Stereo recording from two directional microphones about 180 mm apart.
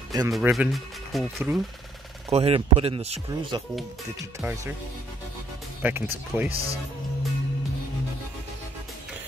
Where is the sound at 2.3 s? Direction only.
35° right (ahead or behind).